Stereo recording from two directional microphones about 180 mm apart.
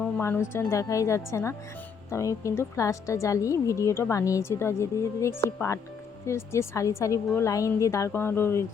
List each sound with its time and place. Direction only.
0.2 s a woman's voice: 15° left (ahead or behind)